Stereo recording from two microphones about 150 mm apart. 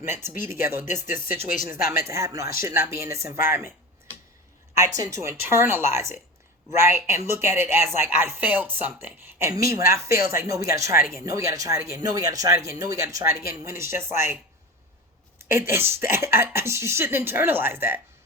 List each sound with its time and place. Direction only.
0.0 s speech: 15° right (ahead or behind)
4.7 s speech: 20° right (ahead or behind)
15.4 s speech: 15° right (ahead or behind)